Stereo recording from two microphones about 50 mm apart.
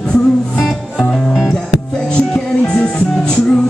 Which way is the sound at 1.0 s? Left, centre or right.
Centre.